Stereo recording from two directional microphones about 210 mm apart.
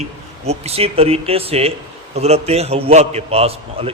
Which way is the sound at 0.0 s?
30° right (ahead or behind).